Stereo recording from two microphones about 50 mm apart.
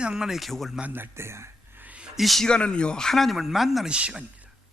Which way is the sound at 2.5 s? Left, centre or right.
Centre.